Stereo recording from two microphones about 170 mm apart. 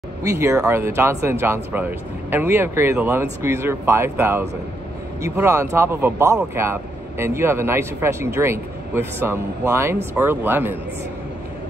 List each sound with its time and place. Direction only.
0.2 s speech: 15° right (ahead or behind)